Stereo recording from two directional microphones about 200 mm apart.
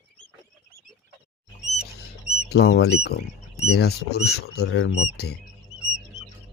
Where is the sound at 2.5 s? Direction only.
55° left (ahead or behind).